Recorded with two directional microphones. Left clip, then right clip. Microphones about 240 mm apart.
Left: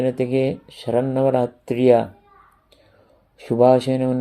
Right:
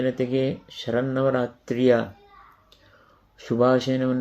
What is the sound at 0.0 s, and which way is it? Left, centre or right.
Speech, centre.